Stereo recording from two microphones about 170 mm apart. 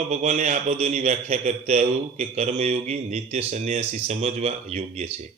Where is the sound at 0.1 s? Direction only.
40° right (ahead or behind).